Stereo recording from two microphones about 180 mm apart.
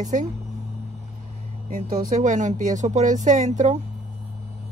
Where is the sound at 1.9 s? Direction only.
50° right (ahead or behind).